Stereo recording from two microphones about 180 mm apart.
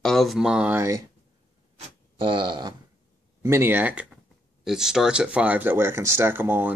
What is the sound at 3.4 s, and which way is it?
Speech, 15° right (ahead or behind).